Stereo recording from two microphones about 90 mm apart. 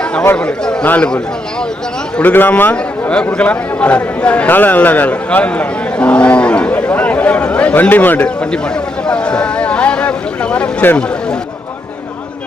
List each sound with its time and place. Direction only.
0.0 s chatter: 10° left (ahead or behind)
0.3 s a man's voice: 10° left (ahead or behind)